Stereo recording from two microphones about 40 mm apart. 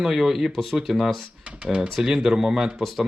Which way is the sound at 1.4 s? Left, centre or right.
Right.